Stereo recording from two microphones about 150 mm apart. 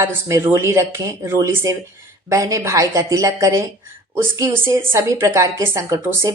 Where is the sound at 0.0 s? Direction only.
20° right (ahead or behind).